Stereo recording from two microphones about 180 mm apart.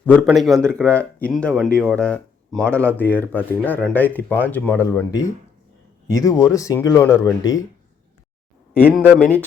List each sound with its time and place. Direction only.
0.0 s a man's voice: 5° left (ahead or behind)
8.9 s speech: 10° right (ahead or behind)